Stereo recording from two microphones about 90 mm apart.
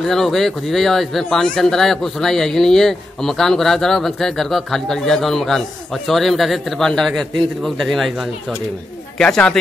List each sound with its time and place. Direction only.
0.0 s a man's voice: 5° left (ahead or behind)